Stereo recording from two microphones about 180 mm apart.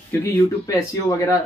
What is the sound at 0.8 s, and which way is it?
Speech, 20° left (ahead or behind).